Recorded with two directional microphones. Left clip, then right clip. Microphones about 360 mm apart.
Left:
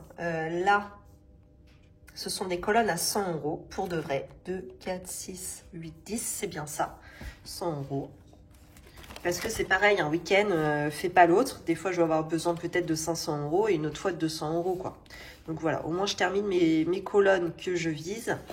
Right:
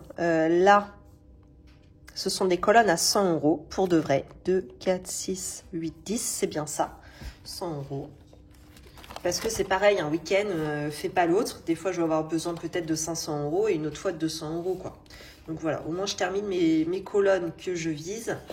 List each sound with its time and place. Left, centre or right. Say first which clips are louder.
0.3 s a sound: right 6 dB; centre
2.1 s a woman's voice: right 7 dB; centre
5.3 s a woman's voice: right 9 dB; centre
7.2 s speech: right 2 dB; centre
9.2 s speech: right 2 dB; centre